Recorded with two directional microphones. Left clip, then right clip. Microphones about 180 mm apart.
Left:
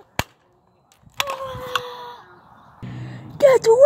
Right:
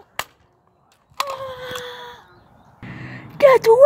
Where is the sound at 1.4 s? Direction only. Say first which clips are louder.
Left 2 dB; 5° left (ahead or behind).